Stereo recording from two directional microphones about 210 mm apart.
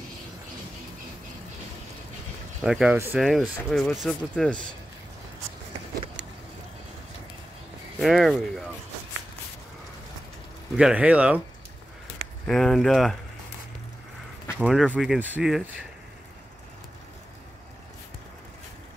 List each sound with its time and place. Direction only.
2.6 s speech: 5° right (ahead or behind)
8.0 s speech: centre (ahead or behind)
10.8 s speech: 5° right (ahead or behind)
12.4 s speech: centre (ahead or behind)
14.6 s speech: 5° right (ahead or behind)